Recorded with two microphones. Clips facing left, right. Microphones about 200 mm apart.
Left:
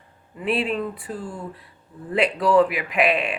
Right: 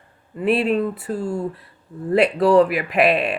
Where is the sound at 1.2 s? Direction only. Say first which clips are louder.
Right 9 dB; 25° right (ahead or behind).